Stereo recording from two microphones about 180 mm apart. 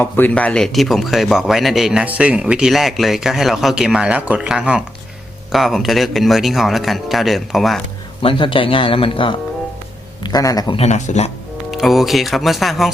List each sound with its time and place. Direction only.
0.0 s a man's voice: 10° left (ahead or behind)
8.2 s speech: 30° left (ahead or behind)
10.8 s speech: 40° left (ahead or behind)
11.7 s a man's voice: centre (ahead or behind)